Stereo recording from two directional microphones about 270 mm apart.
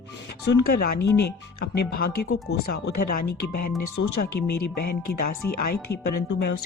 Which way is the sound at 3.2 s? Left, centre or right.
Left.